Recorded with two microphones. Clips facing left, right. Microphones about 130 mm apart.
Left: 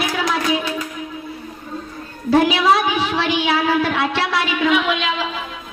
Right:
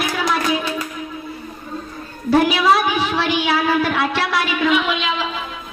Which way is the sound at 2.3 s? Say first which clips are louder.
Even; 25° left (ahead or behind).